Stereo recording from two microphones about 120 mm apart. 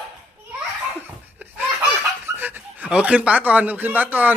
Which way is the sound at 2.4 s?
15° right (ahead or behind).